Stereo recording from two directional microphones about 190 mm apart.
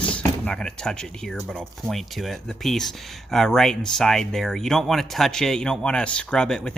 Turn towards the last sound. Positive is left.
turn(degrees=5)  # may be behind; listen again after turning